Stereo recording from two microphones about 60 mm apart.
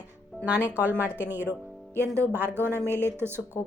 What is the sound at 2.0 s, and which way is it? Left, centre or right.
A woman's voice, right.